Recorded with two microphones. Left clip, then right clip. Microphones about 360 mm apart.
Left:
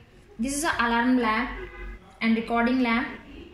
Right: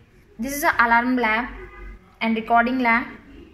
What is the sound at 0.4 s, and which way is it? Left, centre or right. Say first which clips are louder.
A woman's voice: right 6 dB; right.